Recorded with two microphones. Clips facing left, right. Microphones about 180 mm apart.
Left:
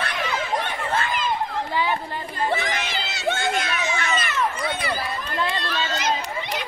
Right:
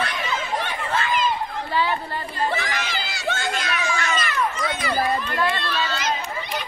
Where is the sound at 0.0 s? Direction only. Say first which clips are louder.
Even; 60° left (ahead or behind).